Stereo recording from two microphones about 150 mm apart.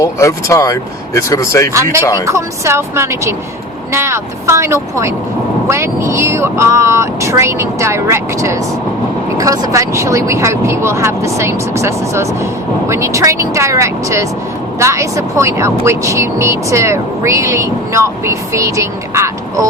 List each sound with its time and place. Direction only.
0.0 s speech: 20° left (ahead or behind)
2.2 s speech: 20° right (ahead or behind)